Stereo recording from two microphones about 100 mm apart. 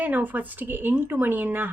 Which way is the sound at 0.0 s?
15° right (ahead or behind).